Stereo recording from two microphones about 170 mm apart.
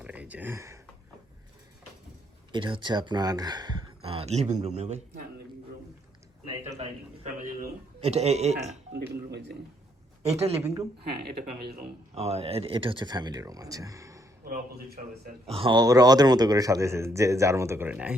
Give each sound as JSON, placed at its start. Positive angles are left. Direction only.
{"t": 0.0, "sound": "a sound", "side_deg": -10}
{"t": 2.5, "sound": "speech", "side_deg": -30}
{"t": 7.3, "sound": "music", "side_deg": -55}
{"t": 8.1, "sound": "a man's voice", "side_deg": -40}
{"t": 8.9, "sound": "a sound", "side_deg": -80}
{"t": 10.2, "sound": "a man's voice", "side_deg": -40}
{"t": 12.1, "sound": "a man's voice", "side_deg": -40}
{"t": 14.4, "sound": "a man's voice", "side_deg": -65}
{"t": 15.4, "sound": "a man's voice", "side_deg": -30}